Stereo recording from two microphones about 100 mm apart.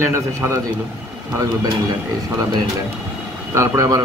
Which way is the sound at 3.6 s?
30° right (ahead or behind).